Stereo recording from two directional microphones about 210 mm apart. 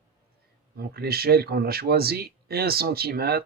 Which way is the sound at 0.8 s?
45° right (ahead or behind).